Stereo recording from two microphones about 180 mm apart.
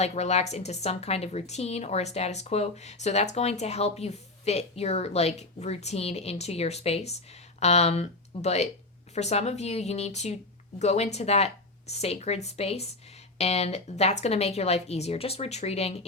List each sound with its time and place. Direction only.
0.0 s a woman's voice: 35° left (ahead or behind)